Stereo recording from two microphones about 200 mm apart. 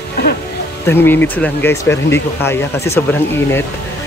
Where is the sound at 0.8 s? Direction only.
10° left (ahead or behind).